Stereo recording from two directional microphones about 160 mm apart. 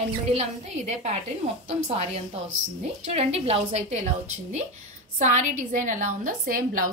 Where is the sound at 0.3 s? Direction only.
45° right (ahead or behind).